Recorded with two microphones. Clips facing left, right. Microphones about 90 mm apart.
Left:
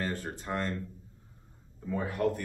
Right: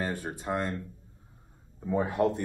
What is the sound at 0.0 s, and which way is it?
Speech, 15° right (ahead or behind).